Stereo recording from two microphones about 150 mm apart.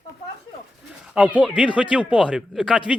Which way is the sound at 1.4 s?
10° right (ahead or behind).